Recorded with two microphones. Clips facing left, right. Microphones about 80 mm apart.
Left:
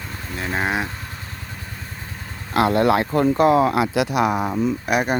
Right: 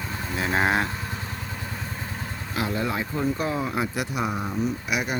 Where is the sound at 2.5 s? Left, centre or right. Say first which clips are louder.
Left 11 dB; left.